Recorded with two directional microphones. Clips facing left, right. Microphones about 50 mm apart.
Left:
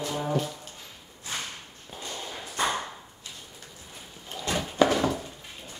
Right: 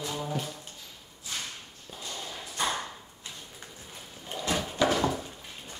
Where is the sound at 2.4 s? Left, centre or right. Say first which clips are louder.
Left 3 dB; left.